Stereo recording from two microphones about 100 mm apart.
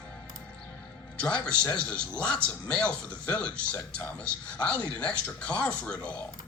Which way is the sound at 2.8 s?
10° left (ahead or behind).